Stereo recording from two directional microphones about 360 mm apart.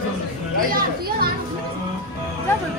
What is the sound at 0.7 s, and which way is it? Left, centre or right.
Speech, right.